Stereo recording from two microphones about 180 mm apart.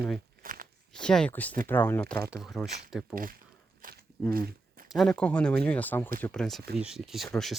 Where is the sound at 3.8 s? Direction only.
50° right (ahead or behind).